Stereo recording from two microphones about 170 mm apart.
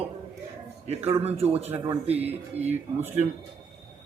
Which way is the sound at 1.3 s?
35° right (ahead or behind).